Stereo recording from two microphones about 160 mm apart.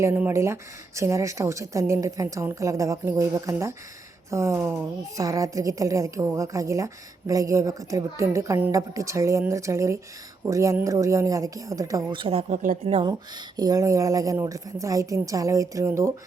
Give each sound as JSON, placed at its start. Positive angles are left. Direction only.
{"t": 0.0, "sound": "a woman's voice", "side_deg": -15}
{"t": 12.2, "sound": "a woman's voice", "side_deg": -35}
{"t": 13.6, "sound": "a woman's voice", "side_deg": -20}